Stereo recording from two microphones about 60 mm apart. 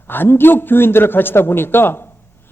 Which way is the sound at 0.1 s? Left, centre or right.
Left.